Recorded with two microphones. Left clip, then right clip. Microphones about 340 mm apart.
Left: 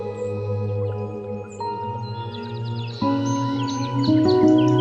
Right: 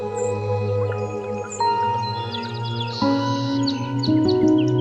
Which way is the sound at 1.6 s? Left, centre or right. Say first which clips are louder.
Right 9 dB; right.